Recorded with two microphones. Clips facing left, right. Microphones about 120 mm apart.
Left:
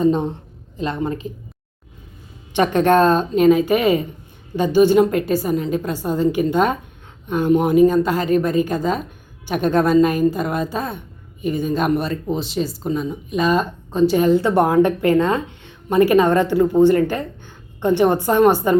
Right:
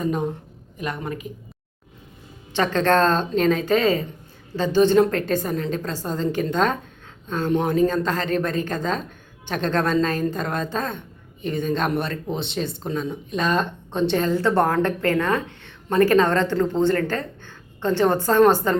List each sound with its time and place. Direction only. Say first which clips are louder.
0.0 s a woman's voice: left 7 dB; 25° left (ahead or behind)
2.5 s a woman's voice: left 4 dB; 15° left (ahead or behind)
14.2 s a woman's voice: left 3 dB; 15° left (ahead or behind)